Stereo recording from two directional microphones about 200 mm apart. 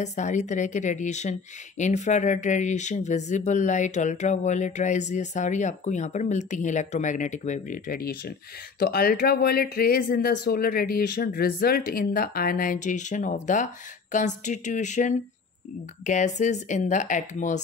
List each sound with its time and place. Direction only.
0.0 s speech: 35° left (ahead or behind)